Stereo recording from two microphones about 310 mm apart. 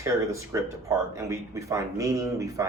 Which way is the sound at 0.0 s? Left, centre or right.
Centre.